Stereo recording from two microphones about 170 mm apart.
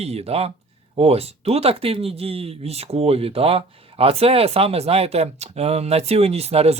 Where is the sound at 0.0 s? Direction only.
40° right (ahead or behind).